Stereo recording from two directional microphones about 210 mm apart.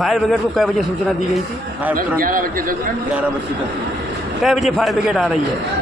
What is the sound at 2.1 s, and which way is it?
Speech, 40° right (ahead or behind).